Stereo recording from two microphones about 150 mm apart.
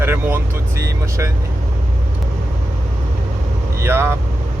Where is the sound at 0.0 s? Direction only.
15° right (ahead or behind).